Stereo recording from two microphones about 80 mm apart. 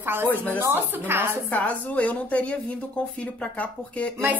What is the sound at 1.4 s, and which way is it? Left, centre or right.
Speech, centre.